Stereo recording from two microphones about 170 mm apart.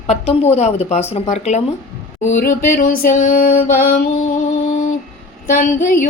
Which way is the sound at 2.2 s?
45° left (ahead or behind).